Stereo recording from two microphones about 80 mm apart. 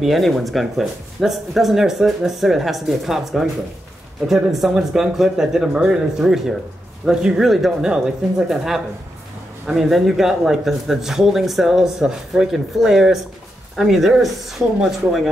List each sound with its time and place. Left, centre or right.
0.0 s speech: centre
5.7 s speech: centre
6.1 s speech: centre